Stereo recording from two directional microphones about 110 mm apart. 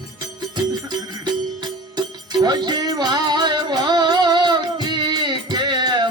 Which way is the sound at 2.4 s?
40° right (ahead or behind).